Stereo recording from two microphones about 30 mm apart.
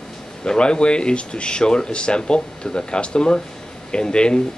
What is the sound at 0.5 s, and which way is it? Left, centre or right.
Speech, left.